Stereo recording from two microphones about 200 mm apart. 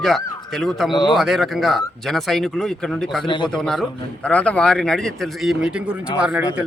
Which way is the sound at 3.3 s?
25° left (ahead or behind).